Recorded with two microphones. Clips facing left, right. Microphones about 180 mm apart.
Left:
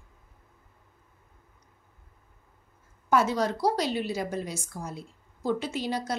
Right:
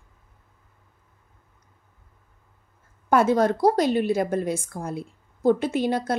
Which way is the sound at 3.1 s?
55° right (ahead or behind).